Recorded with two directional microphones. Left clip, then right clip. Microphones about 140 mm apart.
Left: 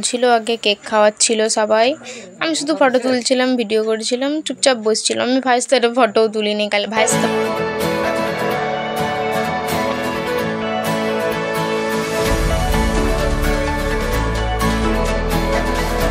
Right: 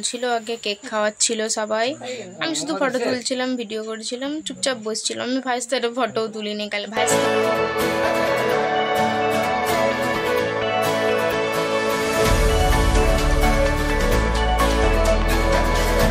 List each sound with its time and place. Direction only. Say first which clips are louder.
0.2 s speech: left 10 dB; 20° left (ahead or behind)
5.5 s speech: left 9 dB; 20° left (ahead or behind)